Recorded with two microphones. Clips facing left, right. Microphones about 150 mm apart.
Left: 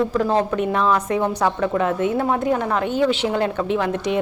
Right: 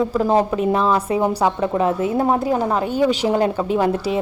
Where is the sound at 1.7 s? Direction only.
35° right (ahead or behind).